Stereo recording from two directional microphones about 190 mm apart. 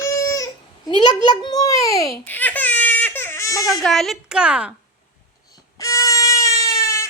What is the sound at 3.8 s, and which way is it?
Speech, centre (ahead or behind).